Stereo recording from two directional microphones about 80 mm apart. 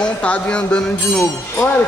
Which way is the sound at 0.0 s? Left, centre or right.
Centre.